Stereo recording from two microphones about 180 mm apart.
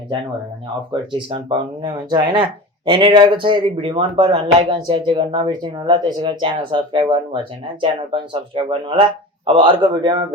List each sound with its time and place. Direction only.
1.1 s speech: 30° right (ahead or behind)